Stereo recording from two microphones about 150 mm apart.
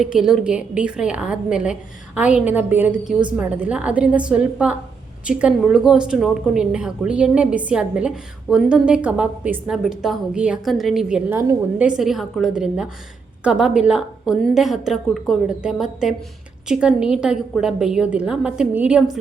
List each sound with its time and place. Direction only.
0.0 s a woman's voice: 5° right (ahead or behind)
11.3 s a woman's voice: 15° right (ahead or behind)
11.9 s a woman's voice: 5° right (ahead or behind)